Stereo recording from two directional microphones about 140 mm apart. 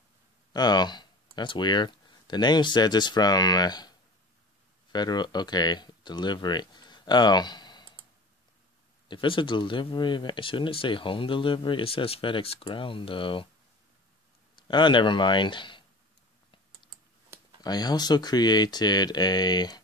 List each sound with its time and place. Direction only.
0.5 s speech: 30° left (ahead or behind)
4.9 s speech: 30° left (ahead or behind)
9.1 s speech: 35° left (ahead or behind)
14.5 s speech: 35° left (ahead or behind)
17.6 s speech: 30° left (ahead or behind)